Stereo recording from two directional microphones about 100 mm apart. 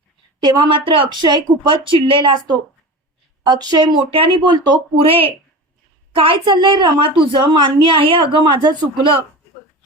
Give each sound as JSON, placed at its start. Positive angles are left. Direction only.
{"t": 0.3, "sound": "speech", "side_deg": -45}
{"t": 4.5, "sound": "speech", "side_deg": -45}
{"t": 5.0, "sound": "speech", "side_deg": -70}